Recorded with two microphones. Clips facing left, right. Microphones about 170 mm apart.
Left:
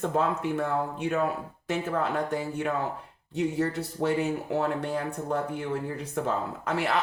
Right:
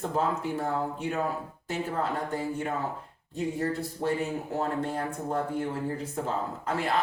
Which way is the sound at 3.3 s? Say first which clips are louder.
Left 2 dB; 75° left (ahead or behind).